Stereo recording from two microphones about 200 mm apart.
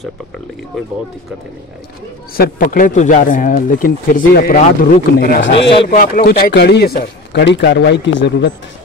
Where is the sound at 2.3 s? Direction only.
45° left (ahead or behind); by 8.5 s 60° left (ahead or behind).